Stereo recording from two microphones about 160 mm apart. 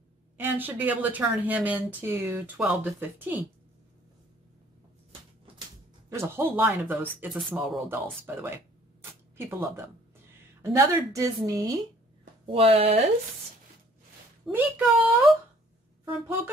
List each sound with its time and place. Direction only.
0.4 s speech: 10° right (ahead or behind)
6.0 s a woman's voice: 15° right (ahead or behind)
12.4 s speech: 35° right (ahead or behind)
14.5 s speech: 10° right (ahead or behind)